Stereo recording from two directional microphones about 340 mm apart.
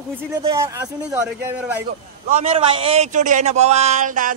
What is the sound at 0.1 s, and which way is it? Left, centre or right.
A man's voice, centre.